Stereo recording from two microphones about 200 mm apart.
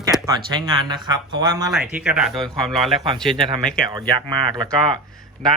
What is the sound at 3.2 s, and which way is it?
Speech, 25° right (ahead or behind).